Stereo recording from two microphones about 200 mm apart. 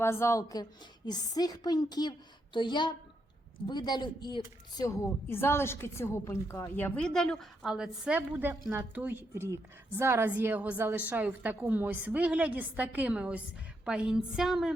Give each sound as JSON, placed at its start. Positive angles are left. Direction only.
{"t": 0.0, "sound": "a woman's voice", "side_deg": 15}